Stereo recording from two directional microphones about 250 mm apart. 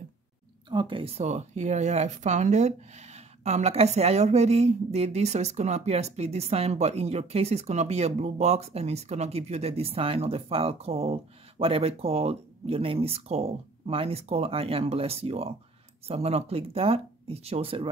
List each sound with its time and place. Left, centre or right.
0.7 s speech: centre